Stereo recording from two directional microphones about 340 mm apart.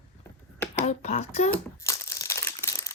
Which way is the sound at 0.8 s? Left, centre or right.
Centre.